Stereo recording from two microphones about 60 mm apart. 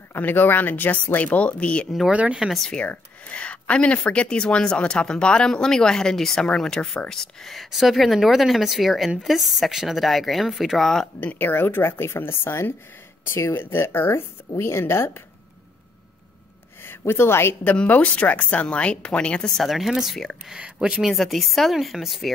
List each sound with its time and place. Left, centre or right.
0.1 s speech: left
2.0 s speech: centre
2.5 s a woman's voice: centre
2.8 s a woman's voice: left; by 11.1 s centre
11.3 s speech: left
16.8 s speech: left
17.6 s speech: left
19.5 s a woman's voice: centre
20.4 s speech: centre
21.0 s a woman's voice: centre